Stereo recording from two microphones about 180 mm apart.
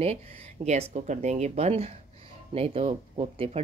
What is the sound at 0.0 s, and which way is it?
Speech, 35° right (ahead or behind).